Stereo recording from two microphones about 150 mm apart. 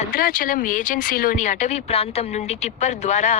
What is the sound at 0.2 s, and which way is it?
Speech, 75° left (ahead or behind).